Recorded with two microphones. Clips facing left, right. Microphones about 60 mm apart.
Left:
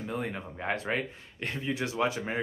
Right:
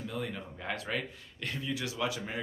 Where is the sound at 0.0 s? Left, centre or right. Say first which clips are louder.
Left 3 dB; left.